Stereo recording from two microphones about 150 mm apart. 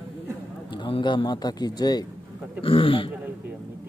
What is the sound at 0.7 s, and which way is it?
A man's voice, 35° left (ahead or behind).